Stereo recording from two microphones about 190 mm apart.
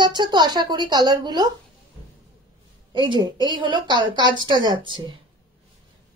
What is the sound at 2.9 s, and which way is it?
A woman's voice, 25° right (ahead or behind).